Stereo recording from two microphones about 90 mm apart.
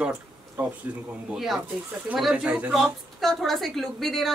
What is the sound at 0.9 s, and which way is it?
Speech, 20° right (ahead or behind).